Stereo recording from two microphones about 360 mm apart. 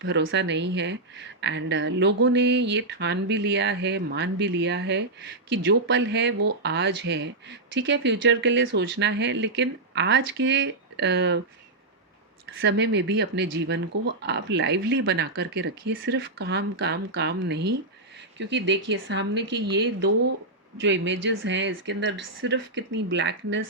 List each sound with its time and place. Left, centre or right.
0.0 s a woman's voice: right
12.5 s a woman's voice: right